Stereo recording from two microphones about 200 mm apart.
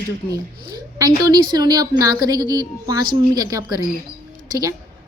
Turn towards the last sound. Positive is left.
turn(degrees=-20)  # may be behind; listen again after turning